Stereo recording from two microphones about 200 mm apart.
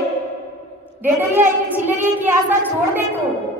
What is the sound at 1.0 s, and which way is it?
A woman's voice, 10° right (ahead or behind).